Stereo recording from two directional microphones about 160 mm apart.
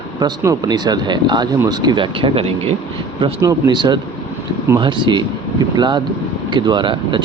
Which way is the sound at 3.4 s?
25° right (ahead or behind).